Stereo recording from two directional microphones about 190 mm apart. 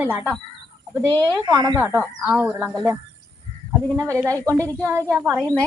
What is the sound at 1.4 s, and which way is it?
Speech, 20° right (ahead or behind).